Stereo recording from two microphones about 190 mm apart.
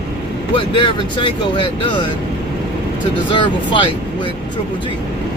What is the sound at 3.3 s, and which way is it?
Speech, 25° left (ahead or behind).